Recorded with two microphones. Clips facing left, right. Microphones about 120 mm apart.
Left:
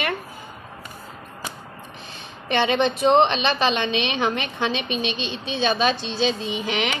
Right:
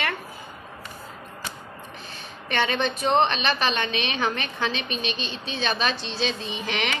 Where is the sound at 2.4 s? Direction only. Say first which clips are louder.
Left 5 dB; 20° left (ahead or behind).